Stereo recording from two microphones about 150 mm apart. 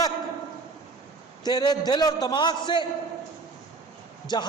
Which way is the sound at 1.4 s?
25° left (ahead or behind).